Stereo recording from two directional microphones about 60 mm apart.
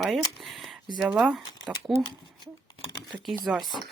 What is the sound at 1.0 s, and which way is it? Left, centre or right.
Speech, centre.